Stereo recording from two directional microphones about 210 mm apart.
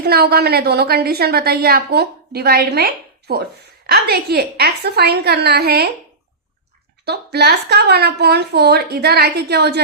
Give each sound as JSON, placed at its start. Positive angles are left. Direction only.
{"t": 0.0, "sound": "a woman's voice", "side_deg": -50}
{"t": 7.0, "sound": "a woman's voice", "side_deg": -50}